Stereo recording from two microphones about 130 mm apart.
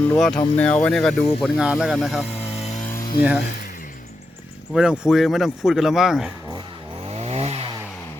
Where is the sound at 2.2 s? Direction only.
50° left (ahead or behind).